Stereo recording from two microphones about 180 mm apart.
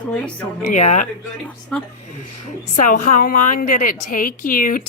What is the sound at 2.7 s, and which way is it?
A woman's voice, 45° left (ahead or behind).